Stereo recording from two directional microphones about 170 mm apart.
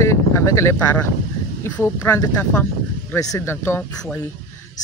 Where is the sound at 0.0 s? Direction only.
15° left (ahead or behind).